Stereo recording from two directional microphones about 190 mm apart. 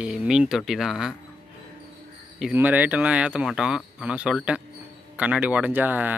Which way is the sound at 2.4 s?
10° right (ahead or behind).